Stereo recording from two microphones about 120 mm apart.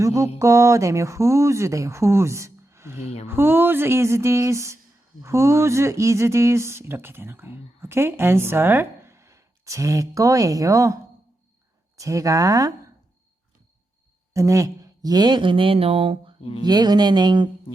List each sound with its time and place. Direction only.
0.0 s speech: 25° right (ahead or behind)
11.9 s speech: 25° right (ahead or behind)
14.3 s speech: 25° right (ahead or behind); by 16.3 s 50° right (ahead or behind)
16.4 s speech: 50° left (ahead or behind)
16.6 s speech: 35° right (ahead or behind)